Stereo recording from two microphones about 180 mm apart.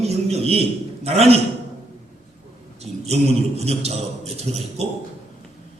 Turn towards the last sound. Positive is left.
turn(degrees=-35)  # may be behind; listen again after turning